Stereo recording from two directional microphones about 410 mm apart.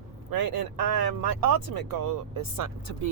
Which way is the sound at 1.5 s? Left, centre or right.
Right.